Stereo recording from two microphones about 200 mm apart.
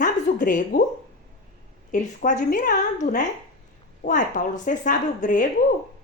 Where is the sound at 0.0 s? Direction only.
40° left (ahead or behind).